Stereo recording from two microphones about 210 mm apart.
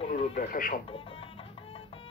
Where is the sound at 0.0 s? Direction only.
30° left (ahead or behind).